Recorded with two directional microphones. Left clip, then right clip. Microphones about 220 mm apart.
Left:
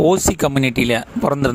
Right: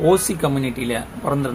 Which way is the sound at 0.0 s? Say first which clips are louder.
Left 2 dB; 45° left (ahead or behind).